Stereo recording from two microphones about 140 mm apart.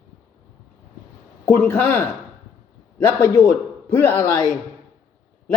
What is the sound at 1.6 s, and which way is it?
Speech, 10° left (ahead or behind).